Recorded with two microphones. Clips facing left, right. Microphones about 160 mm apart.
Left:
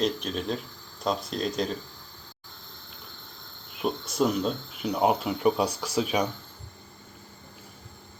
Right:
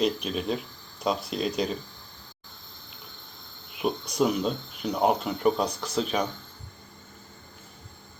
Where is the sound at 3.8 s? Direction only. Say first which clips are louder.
Right 1 dB; centre (ahead or behind).